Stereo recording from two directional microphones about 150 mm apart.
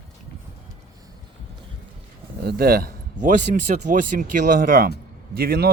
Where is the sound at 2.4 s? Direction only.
90° right.